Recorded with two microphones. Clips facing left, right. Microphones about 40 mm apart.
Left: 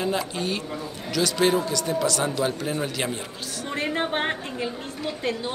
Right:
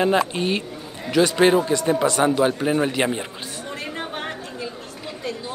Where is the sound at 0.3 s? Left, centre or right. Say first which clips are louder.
Right 4 dB; right.